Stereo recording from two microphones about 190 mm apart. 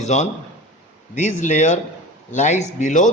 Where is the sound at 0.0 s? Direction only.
35° left (ahead or behind).